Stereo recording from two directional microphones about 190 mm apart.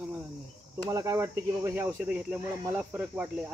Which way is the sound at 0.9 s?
15° right (ahead or behind).